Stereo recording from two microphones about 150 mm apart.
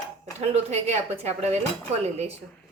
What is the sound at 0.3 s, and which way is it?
Speech, 45° right (ahead or behind).